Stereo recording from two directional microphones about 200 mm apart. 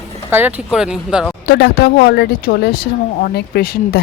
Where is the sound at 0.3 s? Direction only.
10° right (ahead or behind).